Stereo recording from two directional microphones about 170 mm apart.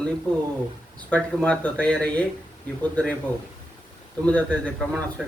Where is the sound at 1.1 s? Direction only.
5° left (ahead or behind).